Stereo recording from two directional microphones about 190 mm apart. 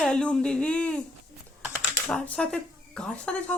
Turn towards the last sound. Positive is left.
turn(degrees=5)  # may be behind; listen again after turning